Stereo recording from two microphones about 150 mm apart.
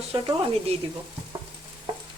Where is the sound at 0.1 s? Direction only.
40° right (ahead or behind).